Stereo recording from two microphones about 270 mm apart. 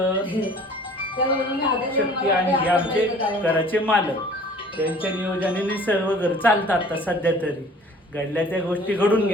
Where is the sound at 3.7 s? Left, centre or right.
Centre.